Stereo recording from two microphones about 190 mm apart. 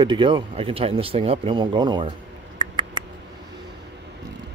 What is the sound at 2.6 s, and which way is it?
Mouse, 25° right (ahead or behind).